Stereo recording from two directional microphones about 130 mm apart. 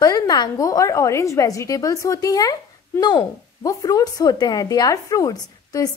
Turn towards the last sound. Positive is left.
turn(degrees=30)  # may be behind; listen again after turning